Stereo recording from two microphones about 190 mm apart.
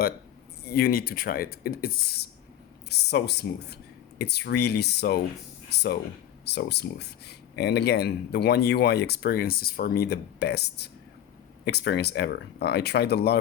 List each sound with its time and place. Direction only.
0.7 s speech: 50° left (ahead or behind)